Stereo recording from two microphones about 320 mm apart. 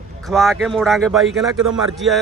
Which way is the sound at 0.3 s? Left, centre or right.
Centre.